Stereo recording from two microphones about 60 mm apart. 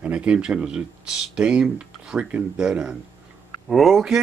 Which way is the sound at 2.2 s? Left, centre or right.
Right.